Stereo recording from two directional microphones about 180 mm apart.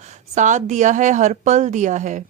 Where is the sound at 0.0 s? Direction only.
40° right (ahead or behind).